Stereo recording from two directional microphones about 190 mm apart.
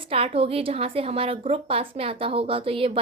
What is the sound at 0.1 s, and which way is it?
A woman's voice, 30° right (ahead or behind).